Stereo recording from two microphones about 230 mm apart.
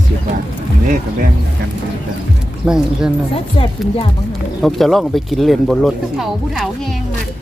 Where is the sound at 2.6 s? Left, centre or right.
Centre.